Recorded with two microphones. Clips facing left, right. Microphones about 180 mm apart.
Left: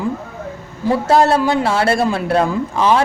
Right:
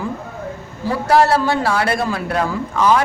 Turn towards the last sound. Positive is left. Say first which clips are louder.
# left 1 dB
turn(degrees=25)  # may be behind; listen again after turning